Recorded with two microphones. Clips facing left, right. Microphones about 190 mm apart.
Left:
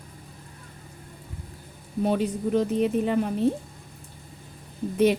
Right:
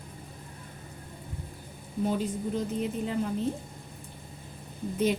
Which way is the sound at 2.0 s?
70° left (ahead or behind).